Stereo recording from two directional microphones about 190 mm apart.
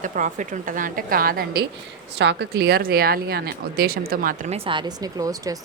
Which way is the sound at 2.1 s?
65° right (ahead or behind).